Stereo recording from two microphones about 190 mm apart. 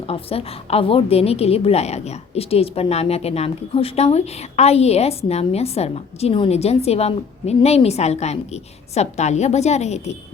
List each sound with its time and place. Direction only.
0.1 s a woman's voice: 30° left (ahead or behind)